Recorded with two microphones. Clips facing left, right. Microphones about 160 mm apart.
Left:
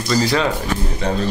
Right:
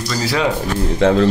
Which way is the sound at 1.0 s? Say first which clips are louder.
Right 10 dB; 90° right.